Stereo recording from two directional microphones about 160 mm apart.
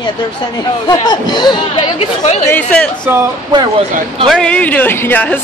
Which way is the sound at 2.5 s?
10° left (ahead or behind).